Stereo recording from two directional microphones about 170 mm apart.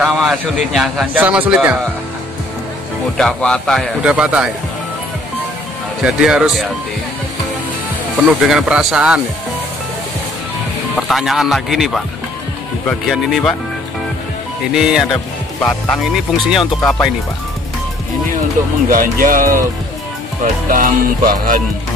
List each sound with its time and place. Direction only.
0.0 s a sound: centre (ahead or behind)
0.7 s speech: 5° right (ahead or behind)
3.2 s speech: 5° left (ahead or behind)
6.0 s speech: 5° right (ahead or behind)
8.3 s speech: 5° right (ahead or behind)
11.0 s speech: centre (ahead or behind)
14.7 s speech: 5° right (ahead or behind)
18.9 s music: 55° right (ahead or behind)
20.7 s music: 55° right (ahead or behind)